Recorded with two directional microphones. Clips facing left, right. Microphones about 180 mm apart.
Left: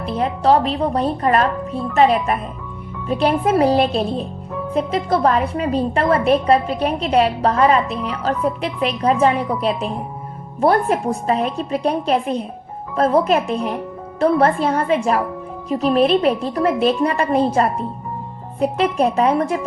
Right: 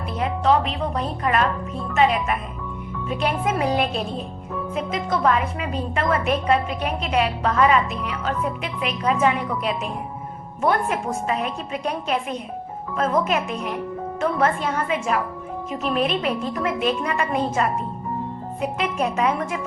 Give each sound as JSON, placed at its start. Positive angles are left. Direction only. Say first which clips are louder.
{"t": 0.1, "sound": "a woman's voice", "louder": "left 4 dB", "side_deg": 35}